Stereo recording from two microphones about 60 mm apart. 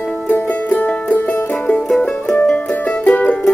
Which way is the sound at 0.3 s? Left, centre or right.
Left.